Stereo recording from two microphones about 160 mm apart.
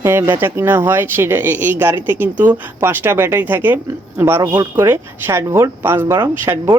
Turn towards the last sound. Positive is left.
turn(degrees=-15)  # may be behind; listen again after turning